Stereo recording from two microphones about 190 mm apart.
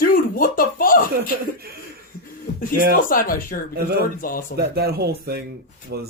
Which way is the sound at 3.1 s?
45° left (ahead or behind).